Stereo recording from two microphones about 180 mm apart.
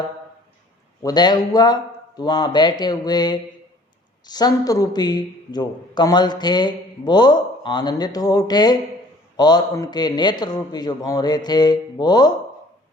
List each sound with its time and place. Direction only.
1.0 s a man's voice: 25° left (ahead or behind)